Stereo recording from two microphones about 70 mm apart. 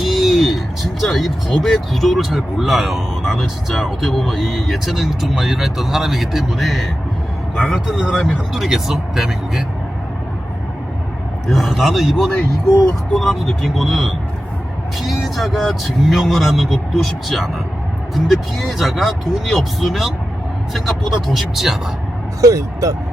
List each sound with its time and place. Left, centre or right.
0.0 s vehicle: centre
1.6 s speech: centre
7.5 s speech: centre
8.5 s speech: centre
11.4 s speech: centre
15.2 s speech: centre
22.4 s speech: right